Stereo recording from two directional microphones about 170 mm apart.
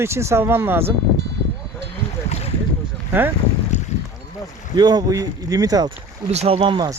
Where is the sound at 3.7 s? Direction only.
40° left (ahead or behind).